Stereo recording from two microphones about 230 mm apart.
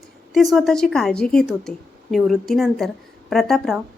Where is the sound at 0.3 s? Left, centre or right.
Centre.